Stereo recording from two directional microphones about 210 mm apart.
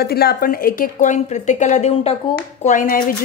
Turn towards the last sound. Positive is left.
turn(degrees=40)  # may be behind; listen again after turning